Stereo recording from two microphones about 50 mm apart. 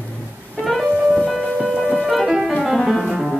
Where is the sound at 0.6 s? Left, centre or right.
Centre.